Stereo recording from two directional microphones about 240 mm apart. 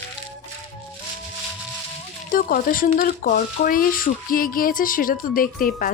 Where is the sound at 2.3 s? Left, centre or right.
Left.